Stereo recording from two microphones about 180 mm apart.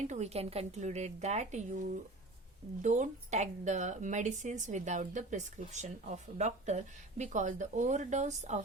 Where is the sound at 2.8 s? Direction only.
45° right (ahead or behind).